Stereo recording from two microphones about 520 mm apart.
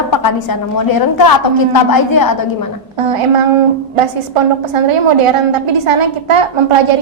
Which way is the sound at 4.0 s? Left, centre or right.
Right.